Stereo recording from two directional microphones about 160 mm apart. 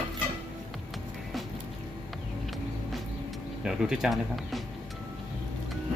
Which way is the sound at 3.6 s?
5° right (ahead or behind).